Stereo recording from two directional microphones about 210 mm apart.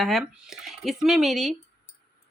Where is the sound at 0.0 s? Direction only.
Centre (ahead or behind).